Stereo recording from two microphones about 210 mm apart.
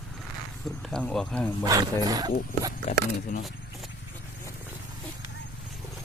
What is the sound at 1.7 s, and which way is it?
Speech, 15° right (ahead or behind).